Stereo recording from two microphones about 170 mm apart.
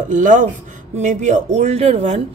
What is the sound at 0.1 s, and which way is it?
A woman's voice, 50° right (ahead or behind).